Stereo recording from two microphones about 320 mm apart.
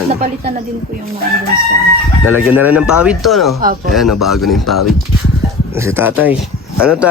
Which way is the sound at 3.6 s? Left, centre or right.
Right.